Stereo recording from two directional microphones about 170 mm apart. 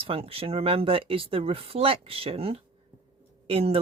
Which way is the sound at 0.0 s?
35° right (ahead or behind).